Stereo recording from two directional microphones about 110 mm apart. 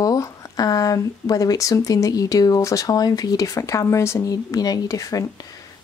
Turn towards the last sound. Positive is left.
turn(degrees=30)  # may be behind; listen again after turning